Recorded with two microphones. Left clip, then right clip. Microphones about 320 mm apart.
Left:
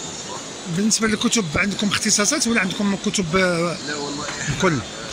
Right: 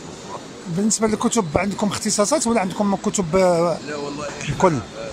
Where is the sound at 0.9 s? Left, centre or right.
Right.